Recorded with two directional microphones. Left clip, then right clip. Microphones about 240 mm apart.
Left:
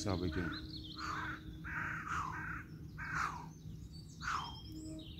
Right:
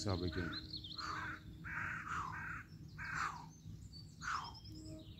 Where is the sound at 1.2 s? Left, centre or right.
Right.